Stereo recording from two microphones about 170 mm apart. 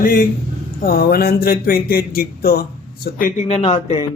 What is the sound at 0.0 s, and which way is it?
A man's voice, 55° left (ahead or behind).